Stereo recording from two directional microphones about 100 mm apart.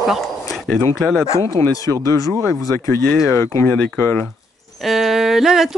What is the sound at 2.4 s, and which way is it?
Speech, 30° left (ahead or behind).